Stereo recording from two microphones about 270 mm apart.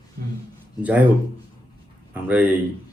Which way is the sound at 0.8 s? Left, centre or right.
Centre.